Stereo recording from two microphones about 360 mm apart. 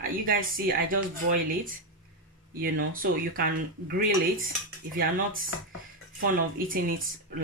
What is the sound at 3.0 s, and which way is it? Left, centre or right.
Speech, right.